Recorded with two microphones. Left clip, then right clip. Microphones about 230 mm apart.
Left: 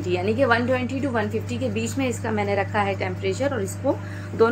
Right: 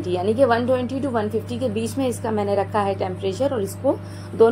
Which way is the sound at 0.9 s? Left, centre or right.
Left.